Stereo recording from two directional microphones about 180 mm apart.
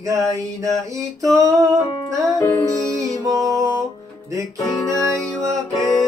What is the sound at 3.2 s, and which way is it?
Music, 20° right (ahead or behind).